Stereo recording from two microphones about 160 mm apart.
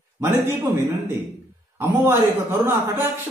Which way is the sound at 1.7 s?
15° right (ahead or behind).